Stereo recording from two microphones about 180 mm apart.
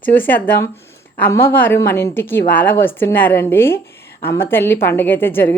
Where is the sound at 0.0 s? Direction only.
10° left (ahead or behind).